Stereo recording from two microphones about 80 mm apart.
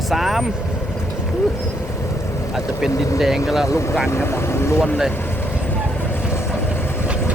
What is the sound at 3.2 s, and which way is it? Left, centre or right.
Speech, centre.